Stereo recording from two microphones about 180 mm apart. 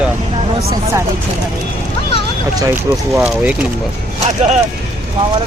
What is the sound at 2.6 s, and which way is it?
Speech, 15° right (ahead or behind).